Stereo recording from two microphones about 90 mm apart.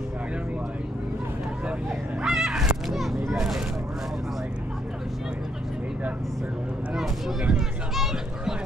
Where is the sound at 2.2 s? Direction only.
5° right (ahead or behind).